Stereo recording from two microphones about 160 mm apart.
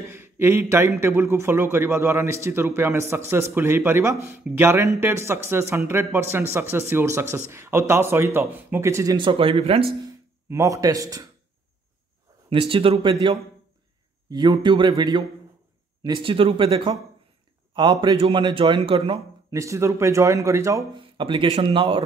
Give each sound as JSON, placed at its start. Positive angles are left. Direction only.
{"t": 0.1, "sound": "speech", "side_deg": -15}
{"t": 10.5, "sound": "speech", "side_deg": -20}
{"t": 12.4, "sound": "a man's voice", "side_deg": -35}
{"t": 14.6, "sound": "a man's voice", "side_deg": -30}
{"t": 18.0, "sound": "a man's voice", "side_deg": -30}
{"t": 19.5, "sound": "speech", "side_deg": -20}